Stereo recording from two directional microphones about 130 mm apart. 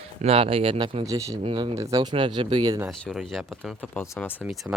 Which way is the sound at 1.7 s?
25° right (ahead or behind).